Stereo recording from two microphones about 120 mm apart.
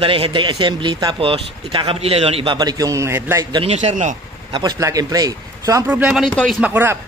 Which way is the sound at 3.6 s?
70° right (ahead or behind).